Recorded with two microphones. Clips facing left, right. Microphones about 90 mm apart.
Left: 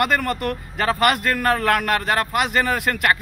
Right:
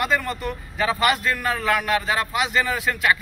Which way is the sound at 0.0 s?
60° left (ahead or behind).